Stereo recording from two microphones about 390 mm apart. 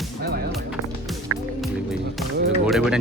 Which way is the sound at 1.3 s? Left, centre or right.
Right.